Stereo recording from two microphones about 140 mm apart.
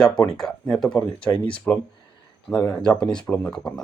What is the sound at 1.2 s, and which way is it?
Speech, 35° left (ahead or behind).